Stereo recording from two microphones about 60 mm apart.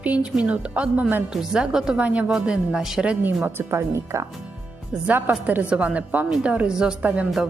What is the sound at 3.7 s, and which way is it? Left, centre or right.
Speech, right.